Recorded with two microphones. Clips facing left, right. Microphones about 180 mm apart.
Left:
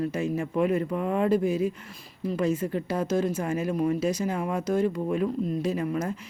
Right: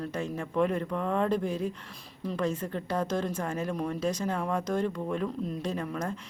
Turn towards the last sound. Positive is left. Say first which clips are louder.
# left 5 dB
turn(degrees=5)  # may be behind; listen again after turning